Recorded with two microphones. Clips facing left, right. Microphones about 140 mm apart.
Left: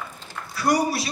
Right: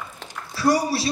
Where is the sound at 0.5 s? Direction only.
30° right (ahead or behind).